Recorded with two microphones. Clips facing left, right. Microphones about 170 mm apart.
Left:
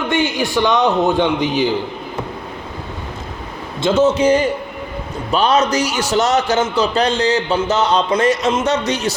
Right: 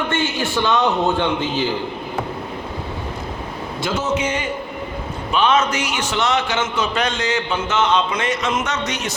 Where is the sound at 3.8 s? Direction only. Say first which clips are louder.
Left 8 dB; 30° left (ahead or behind).